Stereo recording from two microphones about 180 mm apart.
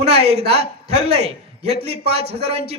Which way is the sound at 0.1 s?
35° right (ahead or behind).